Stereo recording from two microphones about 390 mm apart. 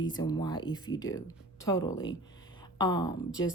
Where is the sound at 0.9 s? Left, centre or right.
Left.